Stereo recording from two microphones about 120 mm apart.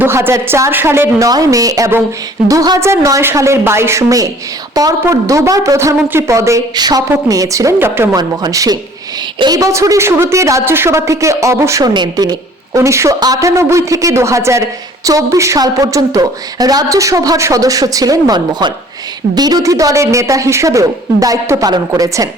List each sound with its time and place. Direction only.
0.0 s a woman's voice: 20° right (ahead or behind)
8.1 s a woman's voice: 35° right (ahead or behind)